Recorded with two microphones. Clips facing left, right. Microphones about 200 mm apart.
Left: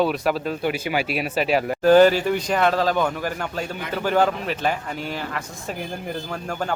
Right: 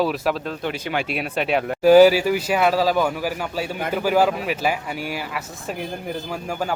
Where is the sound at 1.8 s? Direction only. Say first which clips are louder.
Right 3 dB; 10° right (ahead or behind).